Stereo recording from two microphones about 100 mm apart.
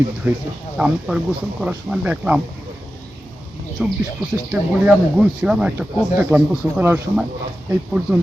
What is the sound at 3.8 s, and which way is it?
Speech, 5° right (ahead or behind).